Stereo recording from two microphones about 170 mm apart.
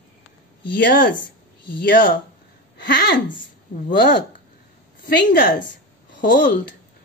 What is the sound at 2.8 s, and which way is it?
Speech, 70° left (ahead or behind).